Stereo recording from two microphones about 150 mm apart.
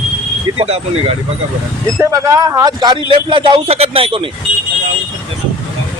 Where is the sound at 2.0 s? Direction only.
20° right (ahead or behind); by 4.3 s 35° right (ahead or behind).